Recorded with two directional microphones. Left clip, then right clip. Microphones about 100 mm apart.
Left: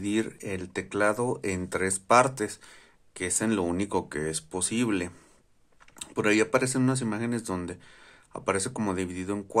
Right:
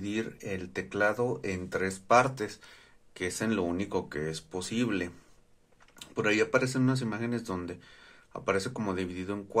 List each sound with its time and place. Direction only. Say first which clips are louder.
0.0 s speech: left 5 dB; 55° left (ahead or behind); by 3.6 s 40° left (ahead or behind)
3.6 s speech: left 3 dB; 55° left (ahead or behind)